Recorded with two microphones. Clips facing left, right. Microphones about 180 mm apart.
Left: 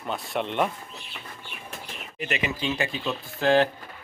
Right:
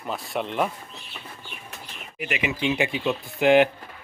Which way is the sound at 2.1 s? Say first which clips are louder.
Right 1 dB; 10° right (ahead or behind).